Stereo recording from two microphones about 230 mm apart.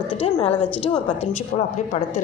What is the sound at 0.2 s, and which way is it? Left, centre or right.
Speech, left.